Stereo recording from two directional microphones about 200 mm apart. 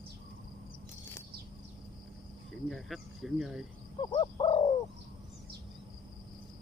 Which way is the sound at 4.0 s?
25° left (ahead or behind).